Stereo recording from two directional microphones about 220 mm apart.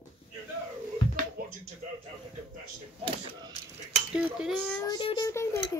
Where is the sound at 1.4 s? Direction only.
45° right (ahead or behind).